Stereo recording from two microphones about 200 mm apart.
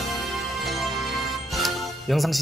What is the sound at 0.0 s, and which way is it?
Music, centre (ahead or behind).